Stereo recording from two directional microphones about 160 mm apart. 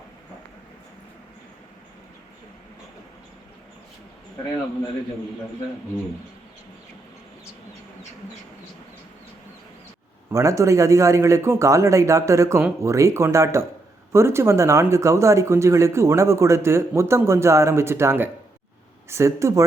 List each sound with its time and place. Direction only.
10.3 s speech: 20° right (ahead or behind)